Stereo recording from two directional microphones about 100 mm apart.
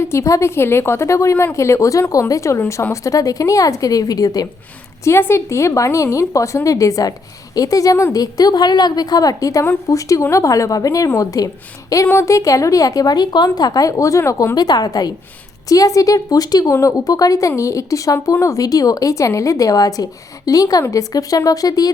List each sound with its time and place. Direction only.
0.0 s a woman's voice: 30° left (ahead or behind)
5.0 s speech: 25° left (ahead or behind)
14.5 s speech: 40° left (ahead or behind)